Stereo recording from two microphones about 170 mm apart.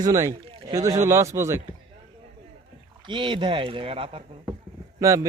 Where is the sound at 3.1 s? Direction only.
30° right (ahead or behind).